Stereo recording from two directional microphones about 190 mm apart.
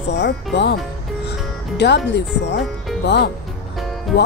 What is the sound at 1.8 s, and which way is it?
Speech, 65° left (ahead or behind).